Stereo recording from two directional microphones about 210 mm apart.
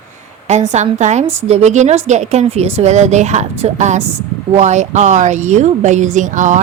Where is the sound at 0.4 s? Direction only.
35° right (ahead or behind).